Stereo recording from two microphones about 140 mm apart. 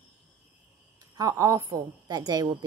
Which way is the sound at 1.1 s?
25° right (ahead or behind).